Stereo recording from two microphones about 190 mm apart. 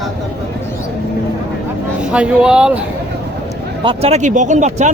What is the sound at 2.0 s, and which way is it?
Speech, 5° right (ahead or behind).